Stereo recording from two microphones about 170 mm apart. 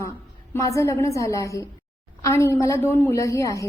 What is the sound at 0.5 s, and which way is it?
A woman's voice, 20° left (ahead or behind).